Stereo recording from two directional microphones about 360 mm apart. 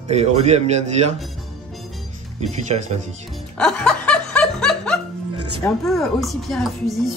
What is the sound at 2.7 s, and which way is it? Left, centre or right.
Speech, centre.